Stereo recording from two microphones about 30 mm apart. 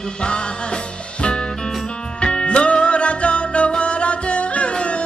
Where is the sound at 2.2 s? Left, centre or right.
Left.